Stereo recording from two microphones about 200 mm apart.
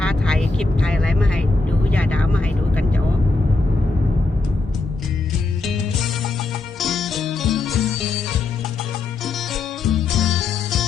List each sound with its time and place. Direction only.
0.0 s vehicle: 5° left (ahead or behind)
5.6 s music: centre (ahead or behind)
9.2 s music: centre (ahead or behind)